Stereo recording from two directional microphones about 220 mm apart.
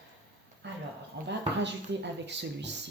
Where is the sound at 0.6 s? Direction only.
50° right (ahead or behind).